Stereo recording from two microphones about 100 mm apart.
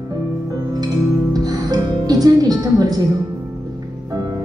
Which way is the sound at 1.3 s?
40° right (ahead or behind).